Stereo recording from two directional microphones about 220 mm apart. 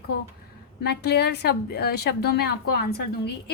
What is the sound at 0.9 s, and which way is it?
A woman's voice, 50° left (ahead or behind).